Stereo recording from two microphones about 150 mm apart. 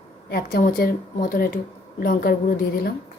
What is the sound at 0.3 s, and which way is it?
Speech, 90° left.